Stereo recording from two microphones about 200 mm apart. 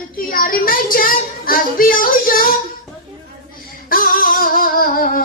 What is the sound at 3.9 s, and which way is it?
Music, 45° left (ahead or behind).